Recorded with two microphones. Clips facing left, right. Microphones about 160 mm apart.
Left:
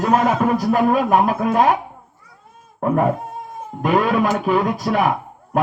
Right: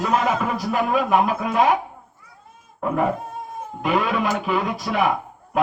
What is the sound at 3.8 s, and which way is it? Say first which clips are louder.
Speech: left 5 dB; 45° left (ahead or behind).